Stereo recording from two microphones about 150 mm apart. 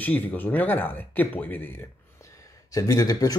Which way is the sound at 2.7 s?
25° left (ahead or behind).